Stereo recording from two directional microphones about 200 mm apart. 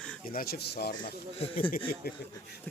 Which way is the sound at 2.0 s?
50° left (ahead or behind).